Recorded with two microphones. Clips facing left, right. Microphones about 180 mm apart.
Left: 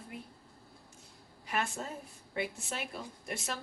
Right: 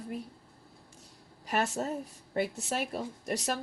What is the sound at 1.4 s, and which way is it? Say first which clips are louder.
A woman's voice: right 5 dB; 40° right (ahead or behind).